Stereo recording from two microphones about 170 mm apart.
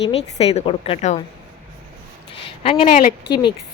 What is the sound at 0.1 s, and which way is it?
A woman's voice, 40° left (ahead or behind).